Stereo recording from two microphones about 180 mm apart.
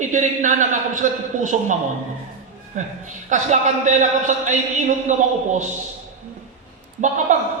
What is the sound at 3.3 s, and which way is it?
Speech, 40° right (ahead or behind).